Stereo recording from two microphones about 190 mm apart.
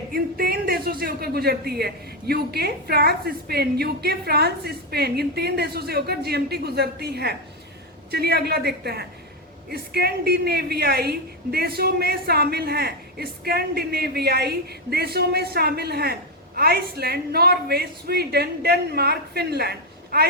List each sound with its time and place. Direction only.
0.1 s speech: 50° right (ahead or behind)